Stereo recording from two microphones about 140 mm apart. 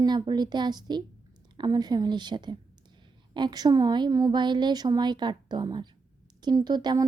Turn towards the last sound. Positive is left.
turn(degrees=-30)  # may be behind; listen again after turning